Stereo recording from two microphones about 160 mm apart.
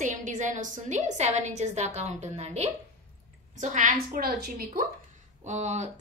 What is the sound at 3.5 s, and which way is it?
A woman's voice, 55° right (ahead or behind).